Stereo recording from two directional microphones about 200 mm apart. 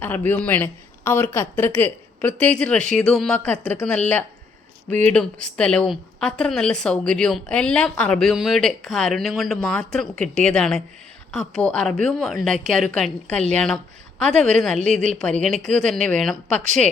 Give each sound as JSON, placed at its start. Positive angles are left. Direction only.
{"t": 0.0, "sound": "a woman's voice", "side_deg": 10}